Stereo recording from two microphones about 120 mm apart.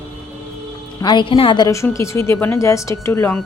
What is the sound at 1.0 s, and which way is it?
Speech, 40° left (ahead or behind).